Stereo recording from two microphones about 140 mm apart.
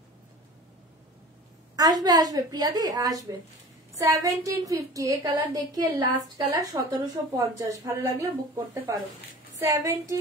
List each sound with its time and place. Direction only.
1.8 s a woman's voice: 30° right (ahead or behind)
9.6 s a woman's voice: 20° right (ahead or behind)